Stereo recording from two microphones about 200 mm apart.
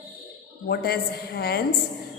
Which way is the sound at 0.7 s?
50° left (ahead or behind).